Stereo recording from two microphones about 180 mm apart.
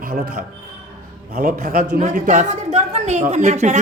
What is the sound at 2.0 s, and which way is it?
A woman's voice, 45° right (ahead or behind).